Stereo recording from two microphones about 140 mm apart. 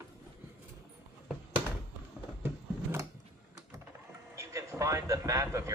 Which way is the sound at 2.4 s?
20° right (ahead or behind).